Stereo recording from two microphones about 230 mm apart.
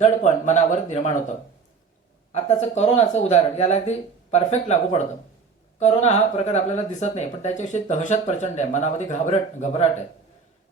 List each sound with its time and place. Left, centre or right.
0.0 s a man's voice: left
2.3 s speech: left